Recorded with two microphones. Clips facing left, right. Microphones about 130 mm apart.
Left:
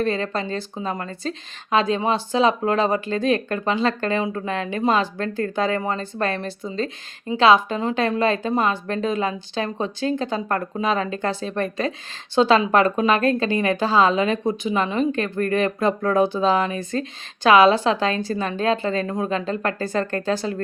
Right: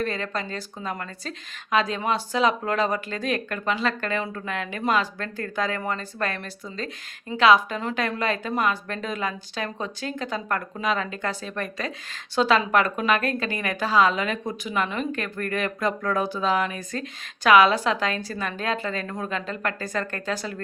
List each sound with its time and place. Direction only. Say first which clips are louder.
0.0 s speech: left 5 dB; 30° left (ahead or behind)